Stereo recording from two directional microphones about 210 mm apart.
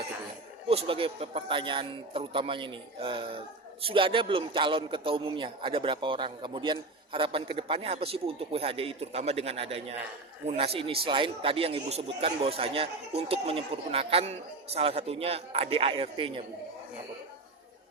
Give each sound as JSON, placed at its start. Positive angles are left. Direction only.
{"t": 0.7, "sound": "a man's voice", "side_deg": -25}